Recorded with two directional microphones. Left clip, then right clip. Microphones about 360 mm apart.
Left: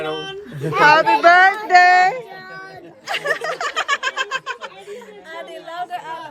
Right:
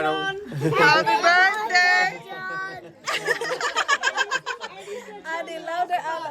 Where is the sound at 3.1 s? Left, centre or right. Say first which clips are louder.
Left 3 dB; centre.